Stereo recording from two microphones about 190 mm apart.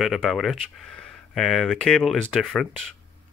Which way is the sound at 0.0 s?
Centre (ahead or behind).